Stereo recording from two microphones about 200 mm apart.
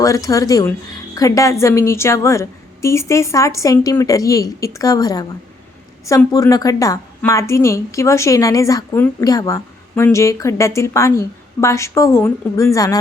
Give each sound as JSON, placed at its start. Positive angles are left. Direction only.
{"t": 0.0, "sound": "a woman's voice", "side_deg": 15}